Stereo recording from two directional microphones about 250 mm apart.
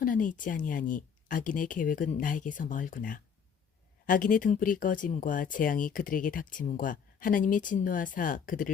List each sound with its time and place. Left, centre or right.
0.0 s speech: left